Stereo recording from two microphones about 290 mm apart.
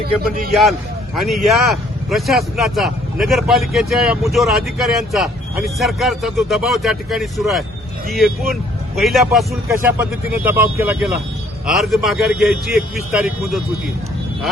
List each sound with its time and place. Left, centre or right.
0.0 s a man's voice: right
0.5 s a man's voice: centre